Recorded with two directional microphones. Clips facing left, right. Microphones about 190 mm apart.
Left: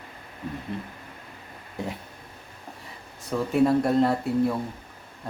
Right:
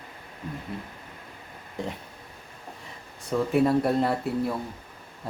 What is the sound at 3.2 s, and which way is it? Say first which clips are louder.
Speech: left 1 dB; centre (ahead or behind).